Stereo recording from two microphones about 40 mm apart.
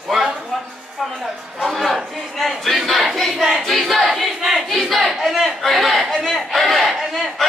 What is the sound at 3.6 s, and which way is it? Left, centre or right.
Battle cry, centre.